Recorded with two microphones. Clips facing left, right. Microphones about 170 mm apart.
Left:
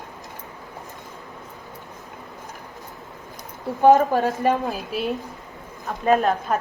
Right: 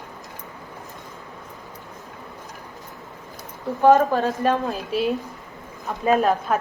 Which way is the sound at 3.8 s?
15° left (ahead or behind).